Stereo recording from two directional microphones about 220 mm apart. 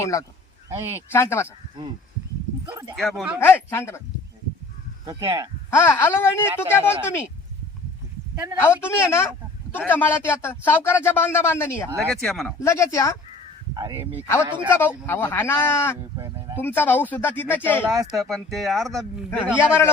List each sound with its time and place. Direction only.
0.0 s speech: 15° left (ahead or behind)
0.7 s speech: 10° right (ahead or behind)
1.1 s speech: 10° left (ahead or behind)
2.6 s speech: 15° right (ahead or behind)
2.9 s speech: centre (ahead or behind)
5.0 s speech: 15° right (ahead or behind)
5.7 s speech: 10° left (ahead or behind)
8.5 s speech: 10° left (ahead or behind)
12.5 s speech: 15° left (ahead or behind)
13.7 s a man's voice: 20° right (ahead or behind)
14.7 s speech: 10° left (ahead or behind)